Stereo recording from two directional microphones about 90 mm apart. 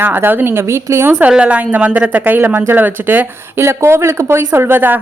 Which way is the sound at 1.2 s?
15° right (ahead or behind).